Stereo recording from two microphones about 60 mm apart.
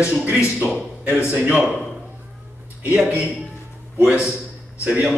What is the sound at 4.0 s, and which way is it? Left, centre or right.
A man's voice, centre.